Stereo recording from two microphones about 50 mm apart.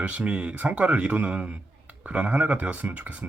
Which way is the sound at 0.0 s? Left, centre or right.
Right.